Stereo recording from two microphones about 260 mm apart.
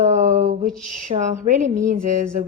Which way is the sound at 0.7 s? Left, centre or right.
Right.